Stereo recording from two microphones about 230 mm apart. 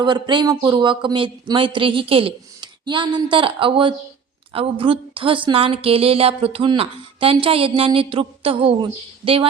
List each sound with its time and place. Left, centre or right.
0.0 s a woman's voice: centre